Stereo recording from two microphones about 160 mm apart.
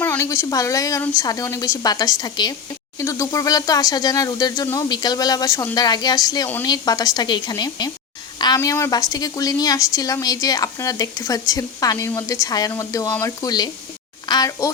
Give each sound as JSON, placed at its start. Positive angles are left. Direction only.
{"t": 0.0, "sound": "a woman's voice", "side_deg": 15}